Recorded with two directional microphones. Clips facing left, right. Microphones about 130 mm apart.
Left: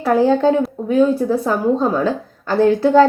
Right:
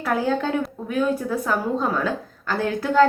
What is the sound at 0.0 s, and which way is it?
A woman's voice, 30° left (ahead or behind).